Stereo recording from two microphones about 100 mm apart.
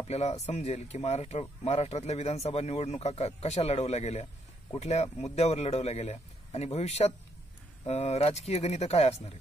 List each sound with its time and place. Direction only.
0.1 s speech: 90° left